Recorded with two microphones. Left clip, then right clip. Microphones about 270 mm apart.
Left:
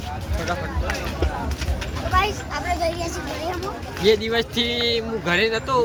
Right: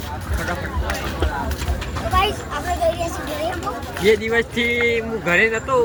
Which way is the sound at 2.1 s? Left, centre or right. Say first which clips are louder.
Right 2 dB; right.